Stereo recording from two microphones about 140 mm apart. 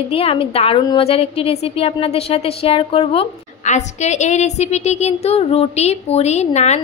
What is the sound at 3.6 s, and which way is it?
A woman's voice, 55° left (ahead or behind).